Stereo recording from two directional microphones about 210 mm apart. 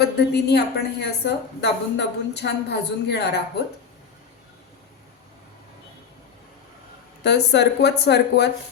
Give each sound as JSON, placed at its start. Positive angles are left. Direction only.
{"t": 0.0, "sound": "a woman's voice", "side_deg": 50}
{"t": 7.3, "sound": "a woman's voice", "side_deg": 55}